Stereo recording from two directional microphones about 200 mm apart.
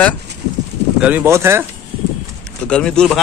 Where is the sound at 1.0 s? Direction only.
10° right (ahead or behind).